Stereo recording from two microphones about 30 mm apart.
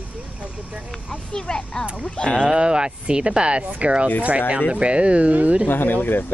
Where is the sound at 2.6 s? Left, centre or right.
Right.